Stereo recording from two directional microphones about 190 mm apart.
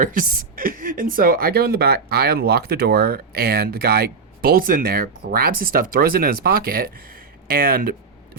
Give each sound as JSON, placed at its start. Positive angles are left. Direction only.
{"t": 0.0, "sound": "speech", "side_deg": -45}